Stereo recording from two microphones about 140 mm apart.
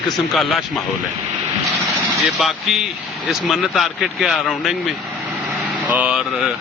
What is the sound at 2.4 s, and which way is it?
Speech, centre (ahead or behind).